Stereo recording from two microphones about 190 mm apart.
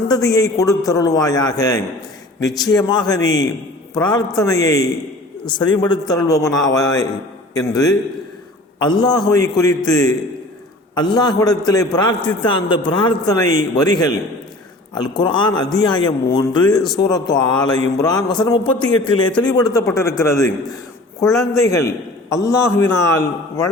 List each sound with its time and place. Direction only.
0.1 s a man's voice: 20° left (ahead or behind)